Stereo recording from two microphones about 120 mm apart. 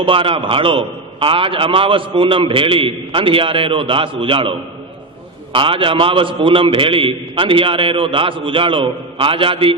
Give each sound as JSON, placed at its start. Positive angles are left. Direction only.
{"t": 0.0, "sound": "a man's voice", "side_deg": -50}